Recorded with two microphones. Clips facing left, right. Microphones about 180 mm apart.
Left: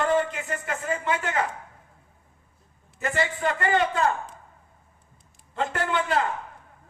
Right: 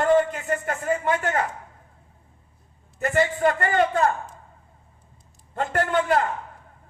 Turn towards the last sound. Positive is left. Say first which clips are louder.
# right 4 dB
turn(degrees=-45)  # may be behind; listen again after turning